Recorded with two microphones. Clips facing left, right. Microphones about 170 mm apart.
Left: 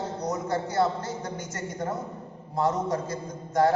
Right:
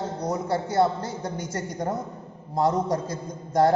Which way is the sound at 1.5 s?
35° right (ahead or behind).